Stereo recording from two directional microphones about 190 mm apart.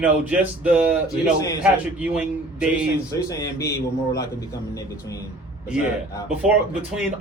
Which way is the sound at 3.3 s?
15° left (ahead or behind).